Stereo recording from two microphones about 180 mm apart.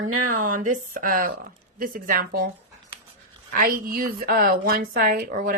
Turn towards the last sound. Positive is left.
turn(degrees=-50)  # may be behind; listen again after turning